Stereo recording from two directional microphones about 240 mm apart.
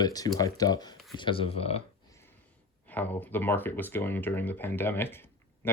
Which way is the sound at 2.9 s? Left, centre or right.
Centre.